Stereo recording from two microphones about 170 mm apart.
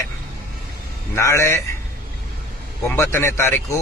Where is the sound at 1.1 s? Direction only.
15° left (ahead or behind).